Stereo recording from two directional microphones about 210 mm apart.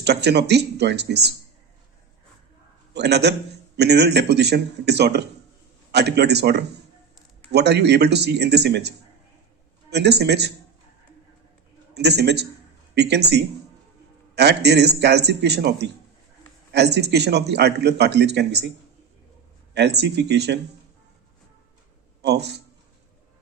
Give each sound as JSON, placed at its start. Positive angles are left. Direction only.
{"t": 0.0, "sound": "a man's voice", "side_deg": -50}
{"t": 2.9, "sound": "a man's voice", "side_deg": -50}
{"t": 11.9, "sound": "a man's voice", "side_deg": -50}
{"t": 19.7, "sound": "a man's voice", "side_deg": -50}
{"t": 22.2, "sound": "a man's voice", "side_deg": -50}